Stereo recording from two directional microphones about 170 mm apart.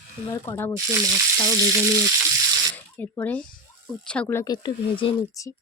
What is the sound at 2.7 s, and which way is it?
Speech, 10° left (ahead or behind).